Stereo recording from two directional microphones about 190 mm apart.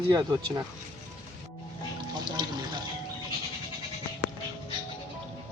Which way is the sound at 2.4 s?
20° right (ahead or behind).